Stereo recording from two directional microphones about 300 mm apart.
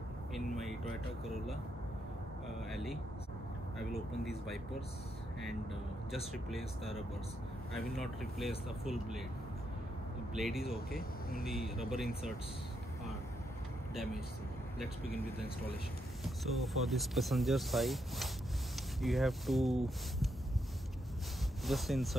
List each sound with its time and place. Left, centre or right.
0.3 s vehicle: centre
2.7 s speech: centre
6.3 s speech: centre
10.3 s speech: centre
11.0 s speech: left
11.4 s speech: centre
16.3 s speech: centre
21.6 s speech: centre